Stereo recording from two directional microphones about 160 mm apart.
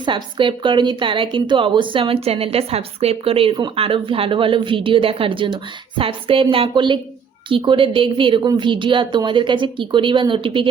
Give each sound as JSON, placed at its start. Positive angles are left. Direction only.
{"t": 0.0, "sound": "a woman's voice", "side_deg": -30}